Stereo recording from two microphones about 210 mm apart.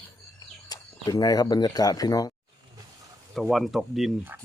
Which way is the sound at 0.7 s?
15° left (ahead or behind).